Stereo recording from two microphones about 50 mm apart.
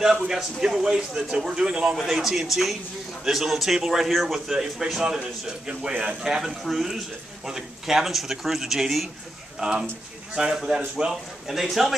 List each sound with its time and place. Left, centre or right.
0.0 s a man's voice: centre
9.6 s a man's voice: centre
11.4 s speech: centre